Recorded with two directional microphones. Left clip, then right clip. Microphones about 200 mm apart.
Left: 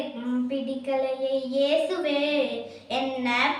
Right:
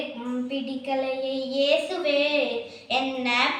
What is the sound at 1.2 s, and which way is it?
Child singing, 15° left (ahead or behind).